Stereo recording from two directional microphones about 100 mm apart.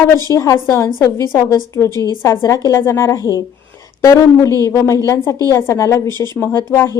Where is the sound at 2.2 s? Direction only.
30° left (ahead or behind).